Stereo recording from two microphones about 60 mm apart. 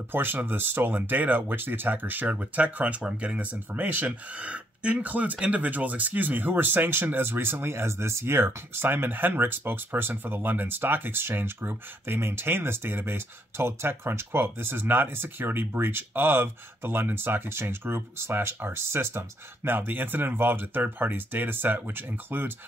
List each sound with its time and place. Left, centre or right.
0.1 s speech: right